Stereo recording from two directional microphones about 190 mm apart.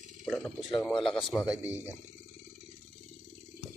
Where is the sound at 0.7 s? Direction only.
Centre (ahead or behind).